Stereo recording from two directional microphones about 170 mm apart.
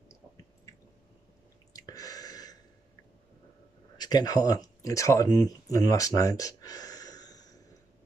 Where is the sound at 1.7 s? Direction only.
20° left (ahead or behind).